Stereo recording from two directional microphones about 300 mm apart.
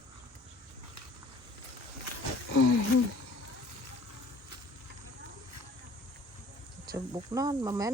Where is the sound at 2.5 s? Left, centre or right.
Left.